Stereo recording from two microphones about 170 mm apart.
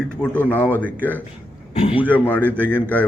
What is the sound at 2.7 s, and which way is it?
Speech, 10° left (ahead or behind).